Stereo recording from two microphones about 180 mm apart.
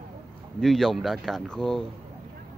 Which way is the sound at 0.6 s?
Centre (ahead or behind).